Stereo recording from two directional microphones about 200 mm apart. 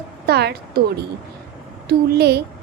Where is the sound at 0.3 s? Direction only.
55° right (ahead or behind).